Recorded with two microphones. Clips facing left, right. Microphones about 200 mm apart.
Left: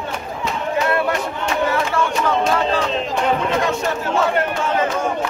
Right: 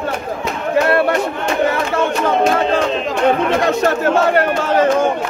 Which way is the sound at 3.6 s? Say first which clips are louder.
Right 6 dB; 65° right (ahead or behind).